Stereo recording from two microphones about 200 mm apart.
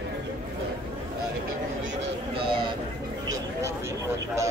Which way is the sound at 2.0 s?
25° right (ahead or behind).